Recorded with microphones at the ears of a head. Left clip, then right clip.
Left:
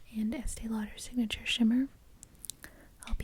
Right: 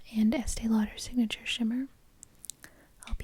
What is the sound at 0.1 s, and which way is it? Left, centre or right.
Speech, right.